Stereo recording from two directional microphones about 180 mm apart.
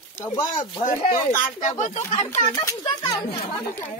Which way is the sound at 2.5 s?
20° left (ahead or behind).